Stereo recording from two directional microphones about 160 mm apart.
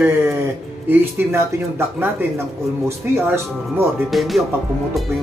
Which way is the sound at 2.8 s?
15° right (ahead or behind).